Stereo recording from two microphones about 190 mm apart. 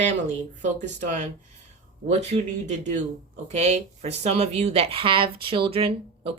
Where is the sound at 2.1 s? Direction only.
35° right (ahead or behind).